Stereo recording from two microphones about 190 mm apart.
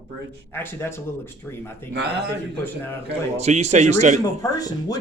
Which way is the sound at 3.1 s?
35° right (ahead or behind).